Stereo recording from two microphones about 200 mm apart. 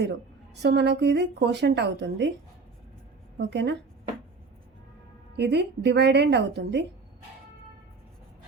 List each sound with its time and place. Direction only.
0.5 s speech: 60° right (ahead or behind)
3.3 s speech: 60° right (ahead or behind)
5.4 s speech: 60° right (ahead or behind)